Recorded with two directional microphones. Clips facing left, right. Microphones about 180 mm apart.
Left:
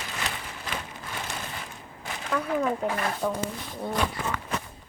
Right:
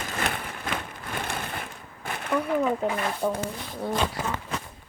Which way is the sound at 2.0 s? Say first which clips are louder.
Right 3 dB; 60° right (ahead or behind).